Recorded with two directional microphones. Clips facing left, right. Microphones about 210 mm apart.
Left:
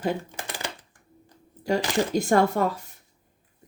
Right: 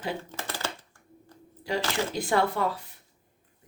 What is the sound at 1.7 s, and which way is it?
A woman's voice, 45° left (ahead or behind).